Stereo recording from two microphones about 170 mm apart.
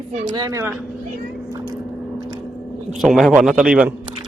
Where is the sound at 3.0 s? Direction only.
Centre (ahead or behind).